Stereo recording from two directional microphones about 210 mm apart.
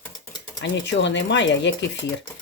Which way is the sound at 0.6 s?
60° left (ahead or behind).